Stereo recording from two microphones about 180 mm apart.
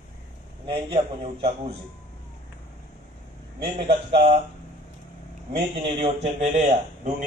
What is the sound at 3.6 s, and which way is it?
Speech, 35° right (ahead or behind).